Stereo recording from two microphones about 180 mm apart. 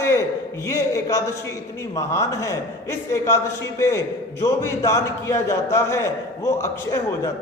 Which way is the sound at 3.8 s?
15° left (ahead or behind).